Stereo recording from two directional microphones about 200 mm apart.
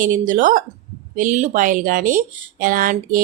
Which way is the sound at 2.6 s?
40° right (ahead or behind).